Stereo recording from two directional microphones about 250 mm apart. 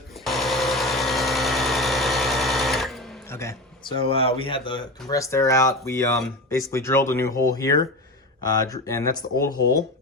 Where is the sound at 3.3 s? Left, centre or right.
Centre.